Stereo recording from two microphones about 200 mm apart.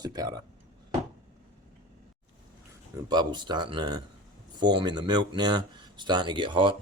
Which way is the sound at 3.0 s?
20° right (ahead or behind).